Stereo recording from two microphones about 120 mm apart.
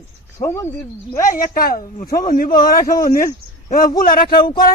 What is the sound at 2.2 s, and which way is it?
Speech, 90° left.